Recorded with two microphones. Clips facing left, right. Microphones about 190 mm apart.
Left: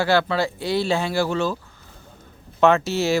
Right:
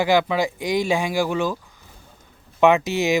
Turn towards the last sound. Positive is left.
turn(degrees=-15)  # may be behind; listen again after turning